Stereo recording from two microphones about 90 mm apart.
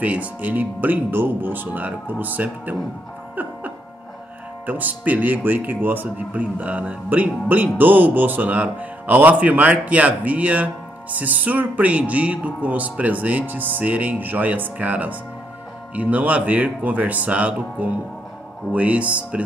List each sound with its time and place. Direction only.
0.0 s speech: 15° right (ahead or behind)
4.6 s speech: 20° right (ahead or behind)